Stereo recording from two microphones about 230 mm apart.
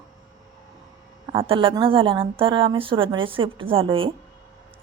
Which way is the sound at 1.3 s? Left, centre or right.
Right.